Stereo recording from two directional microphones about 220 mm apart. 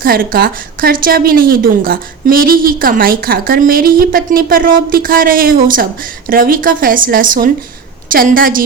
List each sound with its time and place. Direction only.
0.0 s a woman's voice: 40° right (ahead or behind)